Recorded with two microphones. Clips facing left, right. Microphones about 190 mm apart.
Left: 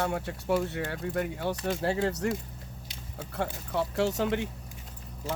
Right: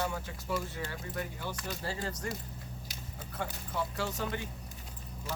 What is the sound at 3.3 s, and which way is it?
Speech, 70° left (ahead or behind).